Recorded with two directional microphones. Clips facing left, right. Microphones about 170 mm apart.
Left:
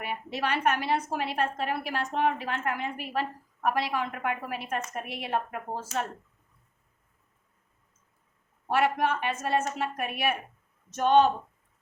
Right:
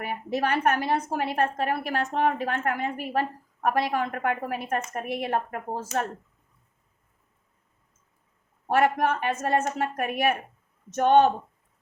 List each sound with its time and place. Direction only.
0.0 s a woman's voice: 45° right (ahead or behind)
8.7 s a woman's voice: 50° right (ahead or behind)